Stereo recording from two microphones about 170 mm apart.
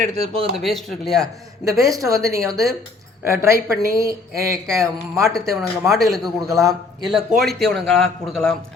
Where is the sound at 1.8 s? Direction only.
20° right (ahead or behind).